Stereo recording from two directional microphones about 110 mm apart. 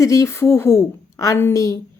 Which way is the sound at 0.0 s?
30° left (ahead or behind).